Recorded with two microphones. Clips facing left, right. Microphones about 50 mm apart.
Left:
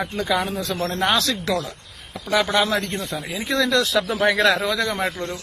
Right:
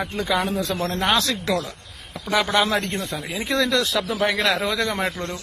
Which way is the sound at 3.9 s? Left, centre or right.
Centre.